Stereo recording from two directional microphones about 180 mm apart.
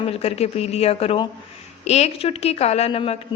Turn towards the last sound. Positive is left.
turn(degrees=35)  # may be behind; listen again after turning